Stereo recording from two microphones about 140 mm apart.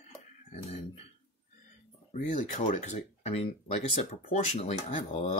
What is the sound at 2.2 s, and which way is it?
Speech, 65° left (ahead or behind).